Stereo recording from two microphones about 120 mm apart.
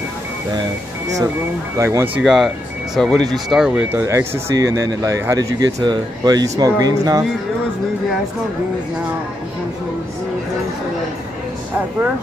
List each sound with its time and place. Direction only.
1.8 s speech: 25° right (ahead or behind)
2.1 s speech: 5° right (ahead or behind)
4.0 s speech: 25° right (ahead or behind)